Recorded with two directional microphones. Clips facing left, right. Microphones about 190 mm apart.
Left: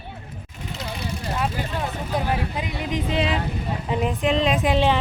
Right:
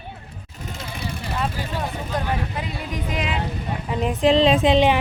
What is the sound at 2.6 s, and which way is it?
Speech, 20° left (ahead or behind).